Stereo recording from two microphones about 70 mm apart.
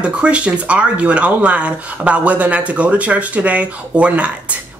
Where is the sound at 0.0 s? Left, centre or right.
Centre.